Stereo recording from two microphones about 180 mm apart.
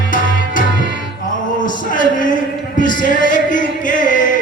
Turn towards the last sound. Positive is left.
turn(degrees=45)  # may be behind; listen again after turning